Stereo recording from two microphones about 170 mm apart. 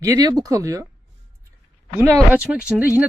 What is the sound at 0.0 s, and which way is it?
Speech, 20° right (ahead or behind).